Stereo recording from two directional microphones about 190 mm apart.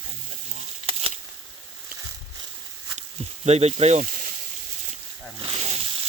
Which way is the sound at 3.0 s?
35° right (ahead or behind).